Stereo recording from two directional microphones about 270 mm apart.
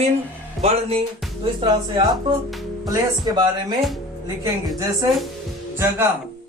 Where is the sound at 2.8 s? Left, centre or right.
Centre.